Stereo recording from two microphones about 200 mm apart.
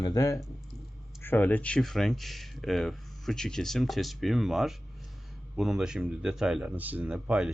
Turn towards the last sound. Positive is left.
turn(degrees=-5)  # may be behind; listen again after turning